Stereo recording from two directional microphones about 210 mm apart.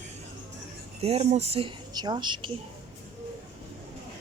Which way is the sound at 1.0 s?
30° right (ahead or behind).